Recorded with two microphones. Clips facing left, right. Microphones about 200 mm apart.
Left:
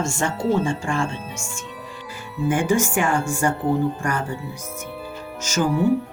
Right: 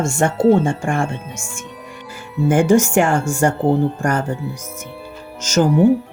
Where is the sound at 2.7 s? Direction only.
45° right (ahead or behind).